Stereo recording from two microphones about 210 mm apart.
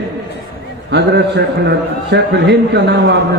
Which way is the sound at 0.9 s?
55° right (ahead or behind).